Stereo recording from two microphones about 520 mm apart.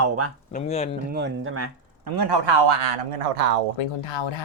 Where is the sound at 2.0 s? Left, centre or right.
Right.